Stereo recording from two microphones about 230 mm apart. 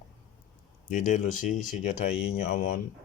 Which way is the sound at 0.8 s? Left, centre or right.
Left.